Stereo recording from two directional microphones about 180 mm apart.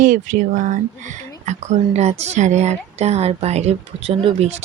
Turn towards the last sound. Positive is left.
turn(degrees=-30)  # may be behind; listen again after turning